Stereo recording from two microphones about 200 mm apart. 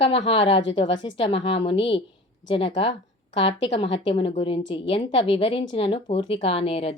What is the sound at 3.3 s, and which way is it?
Speech, 30° left (ahead or behind).